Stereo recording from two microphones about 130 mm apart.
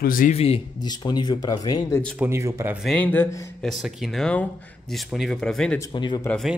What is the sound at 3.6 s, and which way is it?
Speech, centre (ahead or behind).